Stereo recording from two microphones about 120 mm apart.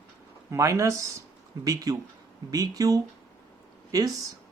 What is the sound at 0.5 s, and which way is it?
Speech, 25° right (ahead or behind).